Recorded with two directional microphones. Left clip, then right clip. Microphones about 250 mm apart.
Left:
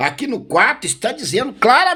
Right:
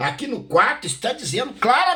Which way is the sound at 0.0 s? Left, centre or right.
Left.